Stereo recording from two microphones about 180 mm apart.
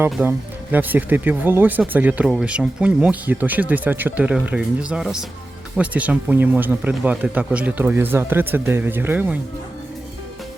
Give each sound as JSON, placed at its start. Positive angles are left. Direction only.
{"t": 0.0, "sound": "speech", "side_deg": -10}